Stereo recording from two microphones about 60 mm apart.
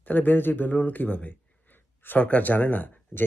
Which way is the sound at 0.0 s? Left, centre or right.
Left.